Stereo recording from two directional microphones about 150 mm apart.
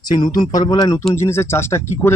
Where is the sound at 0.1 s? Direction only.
25° left (ahead or behind).